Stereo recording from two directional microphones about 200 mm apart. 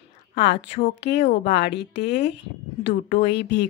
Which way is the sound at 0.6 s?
30° left (ahead or behind).